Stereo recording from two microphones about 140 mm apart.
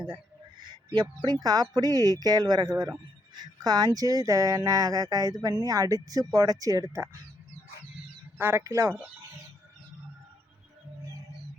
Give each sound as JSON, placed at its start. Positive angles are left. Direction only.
{"t": 0.6, "sound": "speech", "side_deg": -35}
{"t": 8.4, "sound": "speech", "side_deg": -15}